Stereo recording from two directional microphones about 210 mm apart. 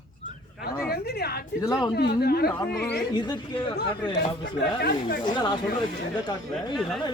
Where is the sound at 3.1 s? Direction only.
20° left (ahead or behind).